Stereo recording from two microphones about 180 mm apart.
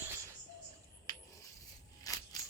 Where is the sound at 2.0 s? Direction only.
20° left (ahead or behind).